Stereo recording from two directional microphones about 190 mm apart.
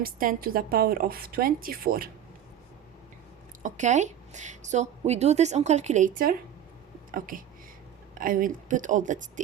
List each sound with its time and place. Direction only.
0.0 s a woman's voice: 50° right (ahead or behind)
3.6 s a woman's voice: 40° right (ahead or behind)